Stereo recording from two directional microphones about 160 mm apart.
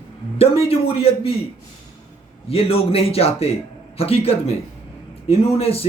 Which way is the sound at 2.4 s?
35° left (ahead or behind).